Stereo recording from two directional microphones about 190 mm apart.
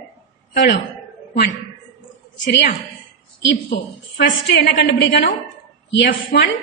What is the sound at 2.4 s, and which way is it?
Speech, 65° left (ahead or behind).